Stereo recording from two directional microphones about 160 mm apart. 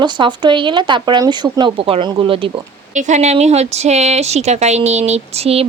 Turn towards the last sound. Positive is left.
turn(degrees=-40)  # may be behind; listen again after turning